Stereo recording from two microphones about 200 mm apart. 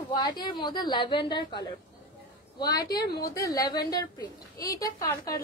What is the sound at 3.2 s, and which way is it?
A woman's voice, 15° left (ahead or behind).